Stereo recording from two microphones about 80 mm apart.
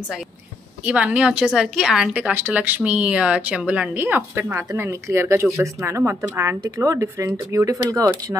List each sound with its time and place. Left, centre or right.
0.8 s a woman's voice: centre
2.2 s speech: right
4.0 s speech: right